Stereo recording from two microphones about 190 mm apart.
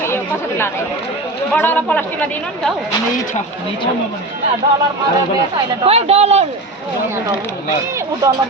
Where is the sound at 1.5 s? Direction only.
10° left (ahead or behind).